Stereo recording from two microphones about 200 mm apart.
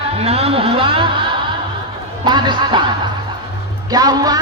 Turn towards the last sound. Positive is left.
turn(degrees=-20)  # may be behind; listen again after turning